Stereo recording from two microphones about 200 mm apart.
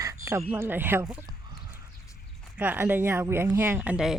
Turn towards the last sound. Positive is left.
turn(degrees=-5)  # may be behind; listen again after turning